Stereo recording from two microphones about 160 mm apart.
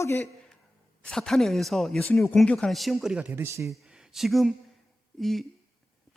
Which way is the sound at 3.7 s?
Centre (ahead or behind).